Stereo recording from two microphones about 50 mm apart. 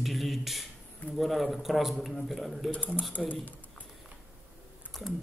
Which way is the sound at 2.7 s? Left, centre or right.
Left.